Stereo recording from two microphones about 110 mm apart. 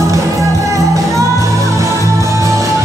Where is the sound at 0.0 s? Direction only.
30° right (ahead or behind).